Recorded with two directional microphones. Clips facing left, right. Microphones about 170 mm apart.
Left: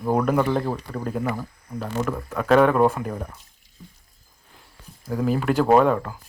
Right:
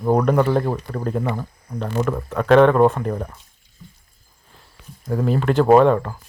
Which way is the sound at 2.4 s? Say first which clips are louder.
Right 4 dB; 5° left (ahead or behind).